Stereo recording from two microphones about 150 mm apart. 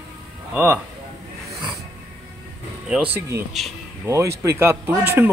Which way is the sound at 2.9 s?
10° right (ahead or behind).